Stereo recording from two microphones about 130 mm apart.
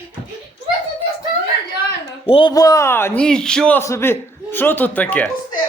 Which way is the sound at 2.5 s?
30° left (ahead or behind).